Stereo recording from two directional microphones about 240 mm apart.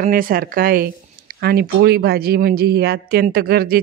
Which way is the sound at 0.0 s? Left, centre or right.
Right.